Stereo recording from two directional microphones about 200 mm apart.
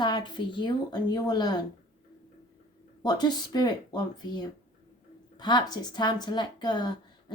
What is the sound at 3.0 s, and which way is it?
A woman's voice, 20° left (ahead or behind).